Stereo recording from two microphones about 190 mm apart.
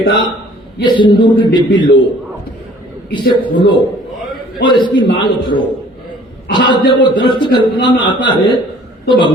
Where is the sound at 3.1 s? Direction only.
25° left (ahead or behind).